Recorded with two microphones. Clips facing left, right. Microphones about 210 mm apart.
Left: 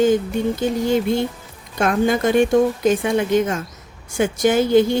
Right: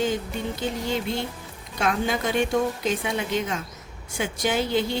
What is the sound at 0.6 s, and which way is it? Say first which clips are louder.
Speech: left 8 dB; 45° left (ahead or behind).